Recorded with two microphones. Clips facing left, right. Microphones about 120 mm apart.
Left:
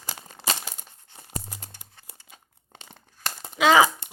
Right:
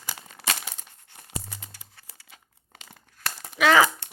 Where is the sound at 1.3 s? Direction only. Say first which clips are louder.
Left 1 dB; 40° left (ahead or behind).